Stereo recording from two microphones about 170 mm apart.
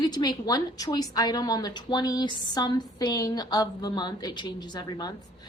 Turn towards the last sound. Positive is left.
turn(degrees=25)  # may be behind; listen again after turning